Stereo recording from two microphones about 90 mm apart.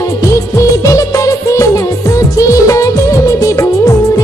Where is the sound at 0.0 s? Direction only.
35° left (ahead or behind).